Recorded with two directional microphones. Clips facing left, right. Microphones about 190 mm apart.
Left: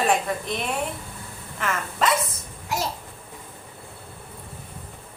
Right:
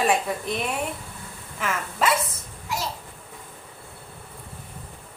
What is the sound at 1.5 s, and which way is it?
Speech, 5° right (ahead or behind).